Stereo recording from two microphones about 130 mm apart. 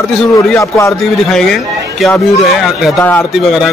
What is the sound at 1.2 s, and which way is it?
Speech, centre (ahead or behind).